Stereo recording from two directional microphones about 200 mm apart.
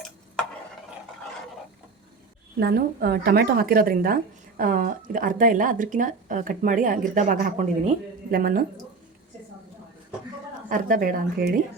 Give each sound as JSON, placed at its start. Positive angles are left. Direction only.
{"t": 2.6, "sound": "a woman's voice", "side_deg": -50}
{"t": 10.7, "sound": "a woman's voice", "side_deg": -45}